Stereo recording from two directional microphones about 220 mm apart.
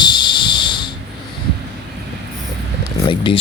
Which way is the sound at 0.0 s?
20° left (ahead or behind).